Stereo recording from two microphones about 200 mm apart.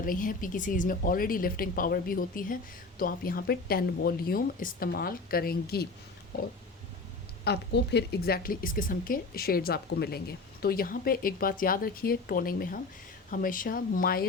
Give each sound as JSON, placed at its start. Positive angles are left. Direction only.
{"t": 0.0, "sound": "speech", "side_deg": 45}